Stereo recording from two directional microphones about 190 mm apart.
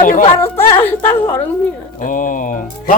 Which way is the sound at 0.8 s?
15° left (ahead or behind).